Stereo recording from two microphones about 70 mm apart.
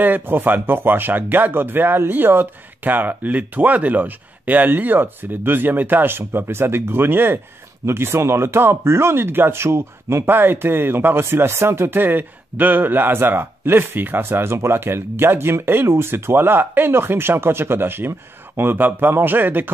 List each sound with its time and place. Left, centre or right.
0.0 s speech: right